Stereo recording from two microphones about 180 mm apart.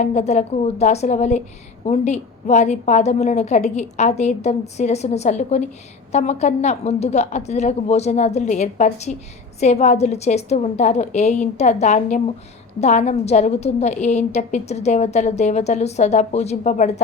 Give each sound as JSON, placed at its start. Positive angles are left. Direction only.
{"t": 0.0, "sound": "a woman's voice", "side_deg": 40}